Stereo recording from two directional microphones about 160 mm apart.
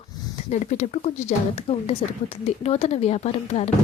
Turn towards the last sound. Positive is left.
turn(degrees=45)  # may be behind; listen again after turning